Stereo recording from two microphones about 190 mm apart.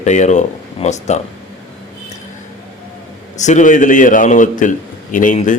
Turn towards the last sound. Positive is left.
turn(degrees=40)  # may be behind; listen again after turning